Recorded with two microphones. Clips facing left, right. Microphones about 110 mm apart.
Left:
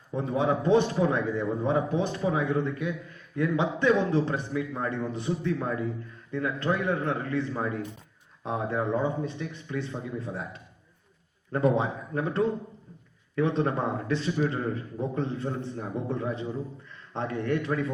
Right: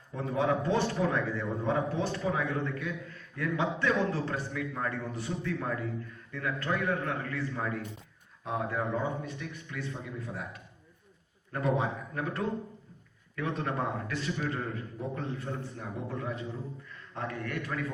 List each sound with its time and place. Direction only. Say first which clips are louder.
0.1 s a man's voice: left 3 dB; 20° left (ahead or behind)